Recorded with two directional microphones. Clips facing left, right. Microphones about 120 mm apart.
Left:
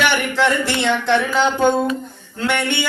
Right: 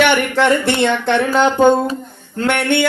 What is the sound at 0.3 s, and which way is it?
Speech, 55° right (ahead or behind).